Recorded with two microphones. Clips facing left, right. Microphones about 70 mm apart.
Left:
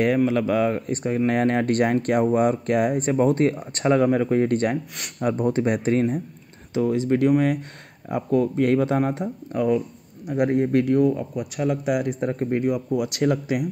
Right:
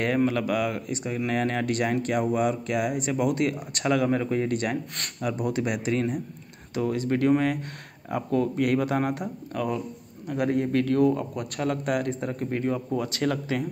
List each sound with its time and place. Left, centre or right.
0.3 s speech: left
0.8 s speech: left
6.7 s speech: left
7.1 s speech: centre
8.5 s speech: left
11.0 s speech: centre
12.2 s speech: left
12.6 s speech: centre